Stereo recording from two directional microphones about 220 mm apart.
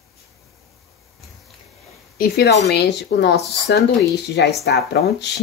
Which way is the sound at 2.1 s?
45° left (ahead or behind).